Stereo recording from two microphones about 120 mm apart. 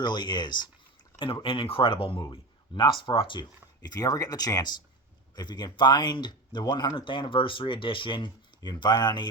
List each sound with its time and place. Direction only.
0.0 s speech: 35° left (ahead or behind)